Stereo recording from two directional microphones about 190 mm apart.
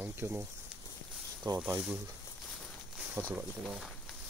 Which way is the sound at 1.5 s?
20° right (ahead or behind).